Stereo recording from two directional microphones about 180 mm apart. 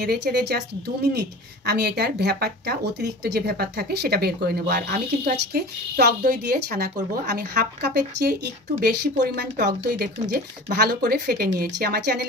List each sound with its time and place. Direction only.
0.0 s speech: 65° right (ahead or behind)